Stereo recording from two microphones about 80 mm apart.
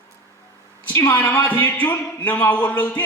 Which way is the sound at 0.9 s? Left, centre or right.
Left.